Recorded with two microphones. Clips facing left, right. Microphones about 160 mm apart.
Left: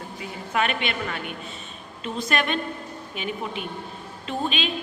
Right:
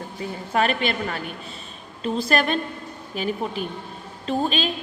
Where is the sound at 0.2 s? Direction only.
35° right (ahead or behind).